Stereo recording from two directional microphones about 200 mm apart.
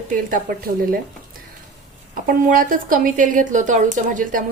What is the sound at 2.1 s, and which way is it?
A woman's voice, 45° right (ahead or behind).